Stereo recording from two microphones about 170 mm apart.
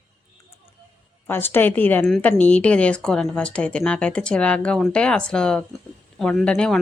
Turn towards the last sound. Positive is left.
turn(degrees=5)  # may be behind; listen again after turning